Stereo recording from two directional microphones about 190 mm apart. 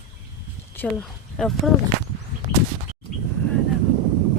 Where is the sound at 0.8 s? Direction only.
5° left (ahead or behind).